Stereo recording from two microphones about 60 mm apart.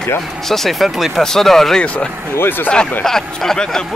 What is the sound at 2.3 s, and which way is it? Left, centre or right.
Speech, left.